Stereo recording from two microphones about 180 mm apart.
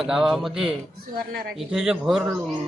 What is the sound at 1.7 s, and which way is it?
Speech, centre (ahead or behind).